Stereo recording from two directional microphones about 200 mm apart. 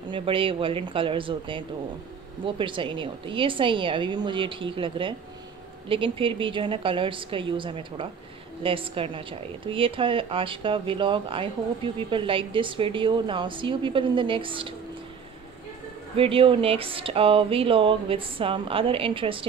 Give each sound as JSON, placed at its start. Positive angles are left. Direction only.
{"t": 0.1, "sound": "speech", "side_deg": -25}
{"t": 16.2, "sound": "speech", "side_deg": -25}